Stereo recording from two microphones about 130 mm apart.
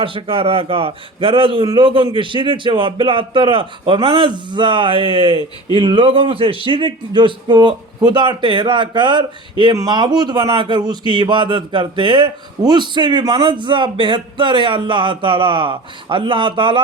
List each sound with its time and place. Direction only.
0.0 s speech: 40° right (ahead or behind)